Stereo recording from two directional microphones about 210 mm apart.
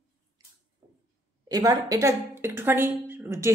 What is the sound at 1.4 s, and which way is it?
Speech, 15° right (ahead or behind).